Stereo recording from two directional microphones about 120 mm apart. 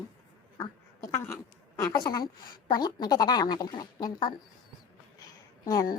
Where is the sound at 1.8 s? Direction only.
35° left (ahead or behind).